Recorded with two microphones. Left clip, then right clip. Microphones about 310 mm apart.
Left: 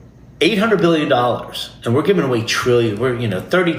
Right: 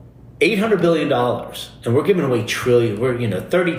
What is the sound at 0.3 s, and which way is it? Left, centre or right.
Speech, left.